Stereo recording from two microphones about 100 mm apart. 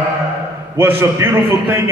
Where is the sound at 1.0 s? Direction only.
25° right (ahead or behind).